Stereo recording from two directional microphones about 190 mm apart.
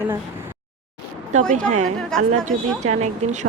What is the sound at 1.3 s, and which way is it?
Speech, 40° right (ahead or behind).